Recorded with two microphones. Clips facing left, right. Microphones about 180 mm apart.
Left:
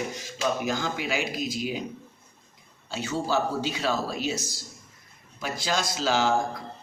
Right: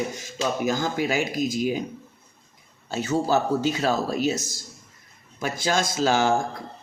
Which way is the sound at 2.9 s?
45° right (ahead or behind).